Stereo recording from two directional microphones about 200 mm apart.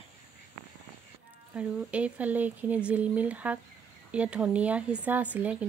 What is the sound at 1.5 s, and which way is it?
Speech, 5° right (ahead or behind).